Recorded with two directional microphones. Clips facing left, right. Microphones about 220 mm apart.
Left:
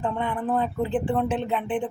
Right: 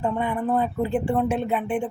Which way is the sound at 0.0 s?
10° right (ahead or behind).